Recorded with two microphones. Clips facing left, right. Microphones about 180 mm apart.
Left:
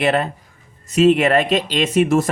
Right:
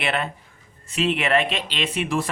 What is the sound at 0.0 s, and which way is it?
Speech, 40° left (ahead or behind).